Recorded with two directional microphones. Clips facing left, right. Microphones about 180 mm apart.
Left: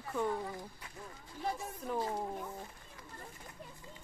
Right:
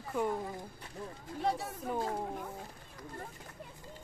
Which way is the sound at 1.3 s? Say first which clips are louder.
Right 5 dB; 70° right (ahead or behind).